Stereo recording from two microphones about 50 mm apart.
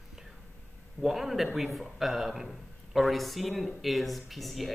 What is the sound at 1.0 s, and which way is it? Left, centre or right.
A man's voice, centre.